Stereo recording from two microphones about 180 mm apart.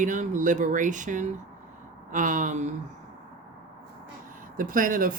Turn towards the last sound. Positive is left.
turn(degrees=-50)  # may be behind; listen again after turning